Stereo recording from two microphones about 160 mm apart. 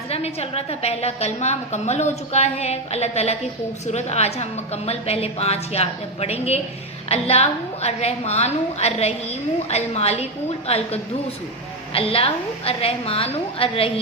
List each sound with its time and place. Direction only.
0.1 s a woman's voice: 40° left (ahead or behind)